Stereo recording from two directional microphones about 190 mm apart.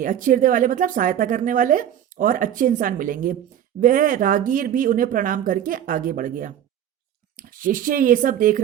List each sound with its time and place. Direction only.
0.0 s speech: 45° right (ahead or behind)